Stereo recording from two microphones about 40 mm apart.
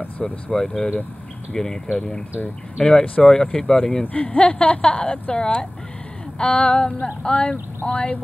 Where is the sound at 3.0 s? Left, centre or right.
Left.